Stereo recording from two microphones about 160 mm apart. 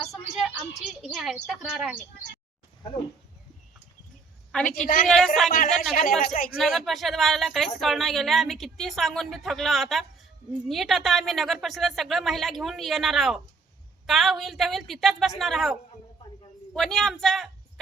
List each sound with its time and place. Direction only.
0.0 s a sound: centre (ahead or behind)
1.1 s a woman's voice: centre (ahead or behind)
5.0 s a woman's voice: centre (ahead or behind)
5.5 s speech: 60° left (ahead or behind)
6.6 s a woman's voice: centre (ahead or behind)